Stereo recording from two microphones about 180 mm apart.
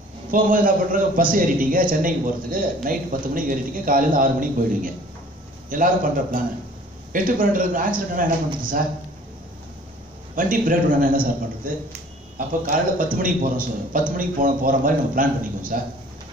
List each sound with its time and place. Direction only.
0.3 s a man's voice: 50° right (ahead or behind)
7.1 s a man's voice: 50° right (ahead or behind)
10.3 s a man's voice: 50° right (ahead or behind)